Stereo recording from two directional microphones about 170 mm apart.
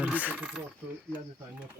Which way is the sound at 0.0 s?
10° right (ahead or behind).